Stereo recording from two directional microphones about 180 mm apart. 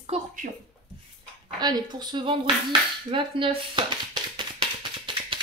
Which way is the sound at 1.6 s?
25° right (ahead or behind).